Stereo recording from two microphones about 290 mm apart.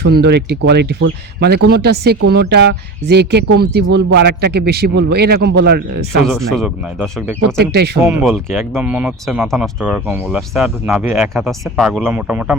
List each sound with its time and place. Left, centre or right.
0.0 s speech: right
6.2 s speech: centre